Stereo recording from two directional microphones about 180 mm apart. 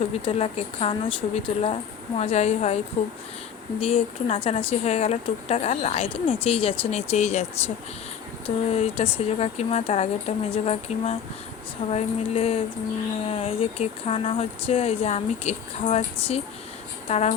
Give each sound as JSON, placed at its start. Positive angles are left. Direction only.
{"t": 0.3, "sound": "a woman's voice", "side_deg": 35}
{"t": 8.4, "sound": "a woman's voice", "side_deg": 35}